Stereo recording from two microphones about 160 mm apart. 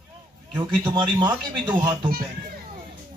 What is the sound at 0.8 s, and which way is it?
Speech, 30° right (ahead or behind).